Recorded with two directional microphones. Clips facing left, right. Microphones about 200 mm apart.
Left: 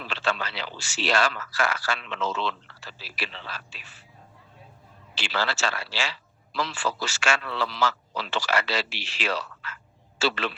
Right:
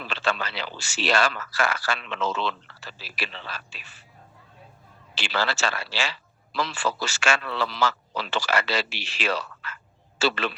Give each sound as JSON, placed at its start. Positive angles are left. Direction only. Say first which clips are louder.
{"t": 0.0, "sound": "speech", "louder": "right 1 dB", "side_deg": -55}
{"t": 5.3, "sound": "a man's voice", "louder": "right 1 dB", "side_deg": -55}